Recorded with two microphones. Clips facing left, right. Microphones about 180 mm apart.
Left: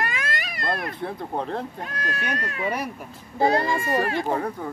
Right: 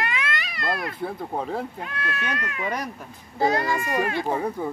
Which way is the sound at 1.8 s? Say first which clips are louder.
Even; 35° left (ahead or behind).